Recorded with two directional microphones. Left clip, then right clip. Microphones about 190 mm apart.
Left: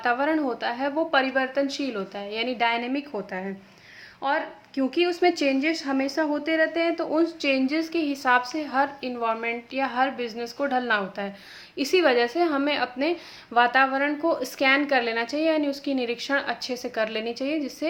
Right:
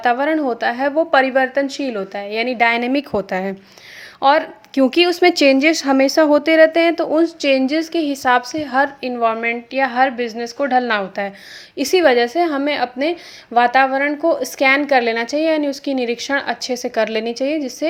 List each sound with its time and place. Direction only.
0.0 s a woman's voice: 35° right (ahead or behind)